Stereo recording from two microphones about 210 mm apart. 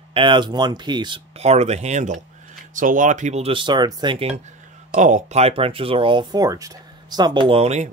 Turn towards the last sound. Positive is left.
turn(degrees=-30)  # may be behind; listen again after turning